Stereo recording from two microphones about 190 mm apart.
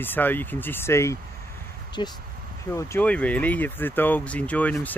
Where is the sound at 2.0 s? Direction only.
25° left (ahead or behind).